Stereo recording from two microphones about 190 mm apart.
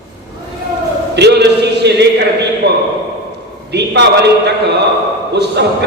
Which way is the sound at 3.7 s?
65° right (ahead or behind).